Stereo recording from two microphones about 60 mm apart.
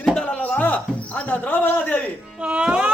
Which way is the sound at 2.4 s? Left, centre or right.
Centre.